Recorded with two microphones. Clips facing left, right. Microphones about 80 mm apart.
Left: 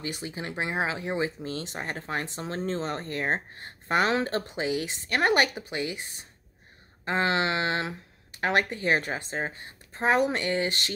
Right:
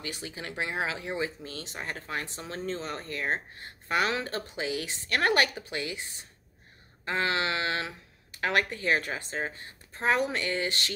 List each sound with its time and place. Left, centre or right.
0.0 s speech: left